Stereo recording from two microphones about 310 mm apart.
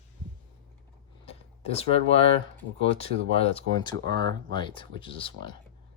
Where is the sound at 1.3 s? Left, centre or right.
Centre.